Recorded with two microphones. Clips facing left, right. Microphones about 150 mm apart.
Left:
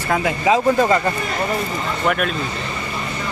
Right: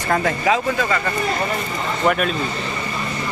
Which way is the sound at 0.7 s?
35° left (ahead or behind).